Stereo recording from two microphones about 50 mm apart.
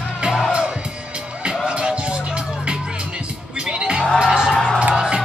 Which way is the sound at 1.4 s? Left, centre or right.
Centre.